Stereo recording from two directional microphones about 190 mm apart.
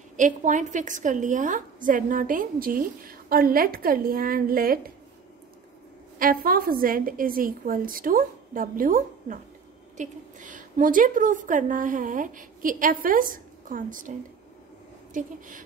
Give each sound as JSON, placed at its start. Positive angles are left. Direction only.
{"t": 0.2, "sound": "a woman's voice", "side_deg": -40}
{"t": 6.1, "sound": "a woman's voice", "side_deg": -50}
{"t": 15.1, "sound": "a woman's voice", "side_deg": -45}